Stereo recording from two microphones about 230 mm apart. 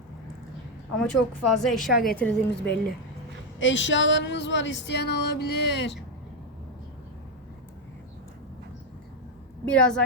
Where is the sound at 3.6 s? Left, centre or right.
Left.